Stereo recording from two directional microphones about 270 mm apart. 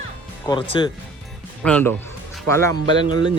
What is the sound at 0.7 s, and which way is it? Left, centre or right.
Speech, centre.